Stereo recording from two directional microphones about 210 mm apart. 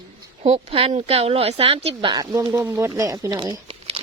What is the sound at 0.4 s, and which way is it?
Speech, 30° right (ahead or behind).